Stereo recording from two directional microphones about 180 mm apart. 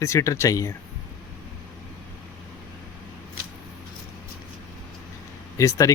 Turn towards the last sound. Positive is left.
turn(degrees=15)  # may be behind; listen again after turning